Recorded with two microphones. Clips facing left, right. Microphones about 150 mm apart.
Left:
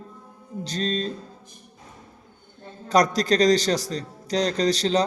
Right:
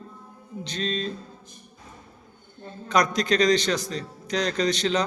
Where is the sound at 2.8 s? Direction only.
40° left (ahead or behind).